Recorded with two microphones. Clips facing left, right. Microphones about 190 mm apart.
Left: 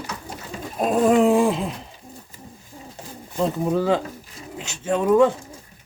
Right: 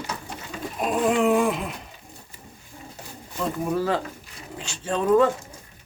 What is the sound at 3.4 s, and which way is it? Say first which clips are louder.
Speech: left 4 dB; 20° left (ahead or behind).